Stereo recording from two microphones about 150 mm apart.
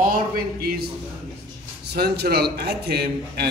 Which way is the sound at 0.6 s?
90° right.